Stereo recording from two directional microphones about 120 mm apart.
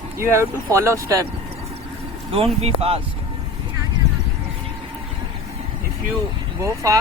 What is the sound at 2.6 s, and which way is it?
Speech, 55° right (ahead or behind).